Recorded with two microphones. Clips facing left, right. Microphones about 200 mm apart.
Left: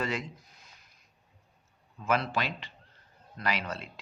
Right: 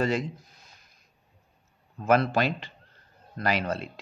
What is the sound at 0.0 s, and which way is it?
Speech, 35° right (ahead or behind).